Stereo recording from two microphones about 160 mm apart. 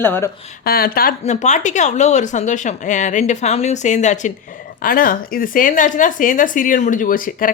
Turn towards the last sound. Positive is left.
turn(degrees=60)  # may be behind; listen again after turning